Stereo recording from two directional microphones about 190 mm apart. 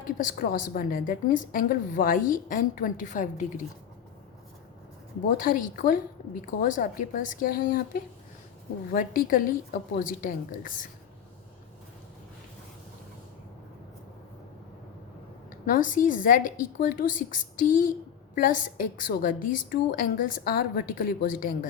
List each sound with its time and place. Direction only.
0.3 s a woman's voice: 45° left (ahead or behind)
5.4 s a woman's voice: 45° left (ahead or behind)
15.4 s a woman's voice: 45° left (ahead or behind)